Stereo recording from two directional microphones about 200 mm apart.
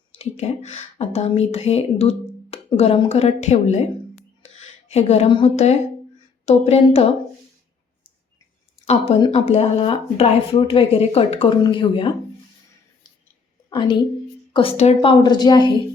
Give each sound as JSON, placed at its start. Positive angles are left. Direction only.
{"t": 0.1, "sound": "a woman's voice", "side_deg": 30}
{"t": 8.8, "sound": "speech", "side_deg": 30}
{"t": 13.7, "sound": "a woman's voice", "side_deg": 20}